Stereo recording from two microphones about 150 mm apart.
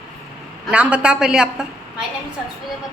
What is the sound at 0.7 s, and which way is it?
A woman's voice, 10° right (ahead or behind).